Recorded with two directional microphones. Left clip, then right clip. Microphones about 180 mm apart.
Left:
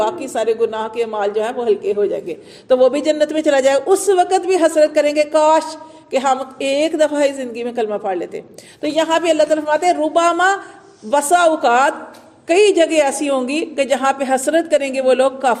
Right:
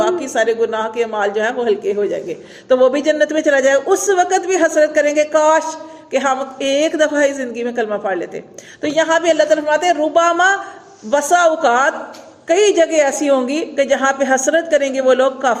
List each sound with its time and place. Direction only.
0.0 s speech: 45° left (ahead or behind)